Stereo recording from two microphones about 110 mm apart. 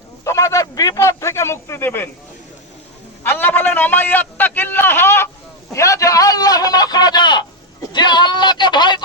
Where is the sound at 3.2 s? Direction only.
20° left (ahead or behind).